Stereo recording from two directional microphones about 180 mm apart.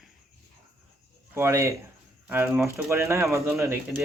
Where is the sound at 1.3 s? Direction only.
15° right (ahead or behind).